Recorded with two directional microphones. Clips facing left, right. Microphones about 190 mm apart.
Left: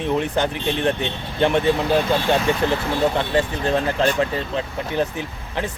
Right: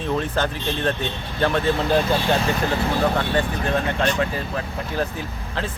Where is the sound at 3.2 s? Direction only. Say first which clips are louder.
Left 2 dB; 25° left (ahead or behind).